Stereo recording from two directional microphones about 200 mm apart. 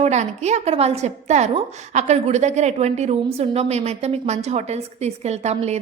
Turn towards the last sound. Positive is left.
turn(degrees=-35)  # may be behind; listen again after turning